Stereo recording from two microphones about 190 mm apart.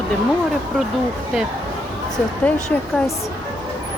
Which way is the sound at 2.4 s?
5° left (ahead or behind).